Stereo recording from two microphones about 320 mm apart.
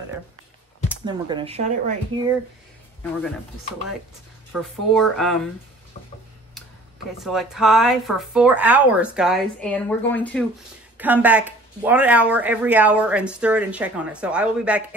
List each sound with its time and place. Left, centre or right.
1.0 s speech: centre
4.5 s speech: centre
7.2 s speech: centre